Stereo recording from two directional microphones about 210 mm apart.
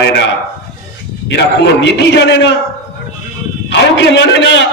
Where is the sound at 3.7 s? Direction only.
55° left (ahead or behind).